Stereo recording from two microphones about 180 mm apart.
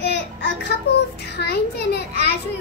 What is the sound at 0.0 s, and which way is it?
Child singing, 70° left (ahead or behind).